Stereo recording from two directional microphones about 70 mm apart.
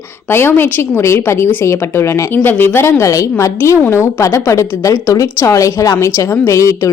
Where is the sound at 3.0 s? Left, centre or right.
Left.